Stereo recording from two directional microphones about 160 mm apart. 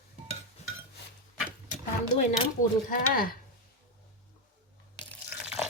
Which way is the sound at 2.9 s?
65° left (ahead or behind).